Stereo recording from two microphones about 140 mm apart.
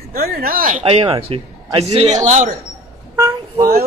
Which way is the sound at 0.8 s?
40° right (ahead or behind).